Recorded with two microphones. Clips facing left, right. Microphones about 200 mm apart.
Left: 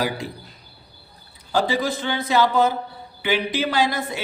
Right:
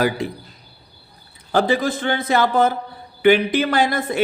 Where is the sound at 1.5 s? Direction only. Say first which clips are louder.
Right 3 dB; 55° right (ahead or behind).